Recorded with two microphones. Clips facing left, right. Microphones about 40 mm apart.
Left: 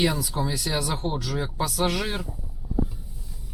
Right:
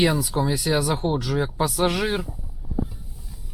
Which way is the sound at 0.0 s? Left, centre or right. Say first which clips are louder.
Right 4 dB; centre.